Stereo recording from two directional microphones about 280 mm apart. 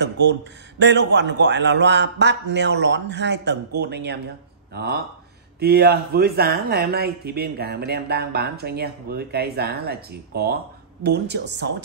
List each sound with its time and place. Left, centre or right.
0.0 s speech: right